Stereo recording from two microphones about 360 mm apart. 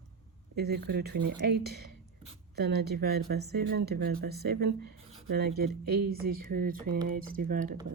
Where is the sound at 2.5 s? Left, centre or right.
Right.